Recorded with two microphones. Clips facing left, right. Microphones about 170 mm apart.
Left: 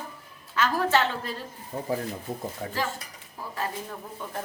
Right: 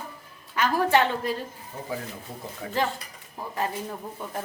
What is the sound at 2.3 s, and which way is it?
Speech, 50° left (ahead or behind).